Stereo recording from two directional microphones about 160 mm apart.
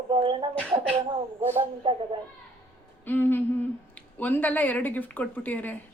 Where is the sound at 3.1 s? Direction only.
10° left (ahead or behind).